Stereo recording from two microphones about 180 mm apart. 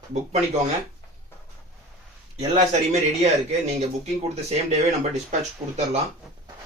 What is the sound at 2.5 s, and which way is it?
Speech, 40° right (ahead or behind).